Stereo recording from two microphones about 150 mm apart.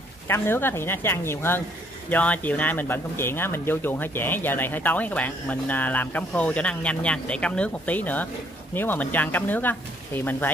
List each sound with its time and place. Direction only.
0.3 s speech: 15° left (ahead or behind)